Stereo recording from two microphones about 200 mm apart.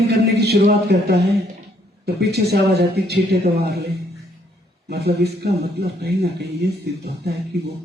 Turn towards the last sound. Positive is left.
turn(degrees=-55)  # may be behind; listen again after turning